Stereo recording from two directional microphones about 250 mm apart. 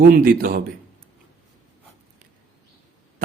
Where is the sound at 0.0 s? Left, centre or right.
Right.